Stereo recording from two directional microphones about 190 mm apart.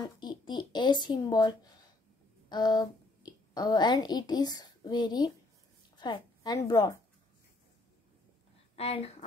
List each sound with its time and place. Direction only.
0.0 s a woman's voice: 25° left (ahead or behind)
8.7 s speech: 30° left (ahead or behind)